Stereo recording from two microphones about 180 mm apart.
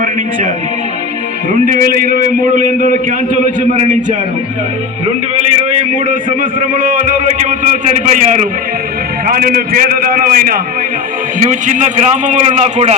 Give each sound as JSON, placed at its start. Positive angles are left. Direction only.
{"t": 1.6, "sound": "a man's voice", "side_deg": -50}
{"t": 6.7, "sound": "a man's voice", "side_deg": -45}
{"t": 9.2, "sound": "a man's voice", "side_deg": -55}